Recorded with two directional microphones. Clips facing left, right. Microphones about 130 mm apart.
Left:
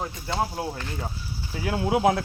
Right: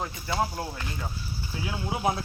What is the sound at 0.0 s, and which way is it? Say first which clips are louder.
Speech: left 1 dB; 15° left (ahead or behind).